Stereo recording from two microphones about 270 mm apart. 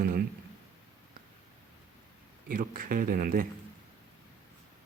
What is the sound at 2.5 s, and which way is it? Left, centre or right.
Speech, right.